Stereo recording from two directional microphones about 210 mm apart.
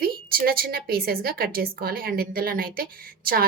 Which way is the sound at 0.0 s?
45° right (ahead or behind).